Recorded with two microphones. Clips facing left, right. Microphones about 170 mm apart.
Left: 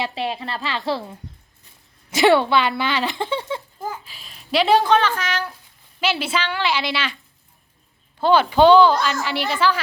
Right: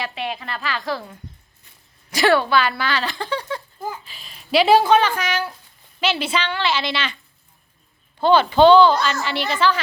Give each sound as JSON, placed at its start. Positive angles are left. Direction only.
{"t": 0.0, "sound": "speech", "side_deg": 30}
{"t": 4.0, "sound": "speech", "side_deg": 0}
{"t": 6.0, "sound": "a woman's voice", "side_deg": 5}
{"t": 8.2, "sound": "a woman's voice", "side_deg": 10}